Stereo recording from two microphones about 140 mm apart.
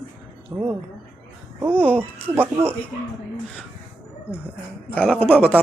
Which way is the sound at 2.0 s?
15° right (ahead or behind).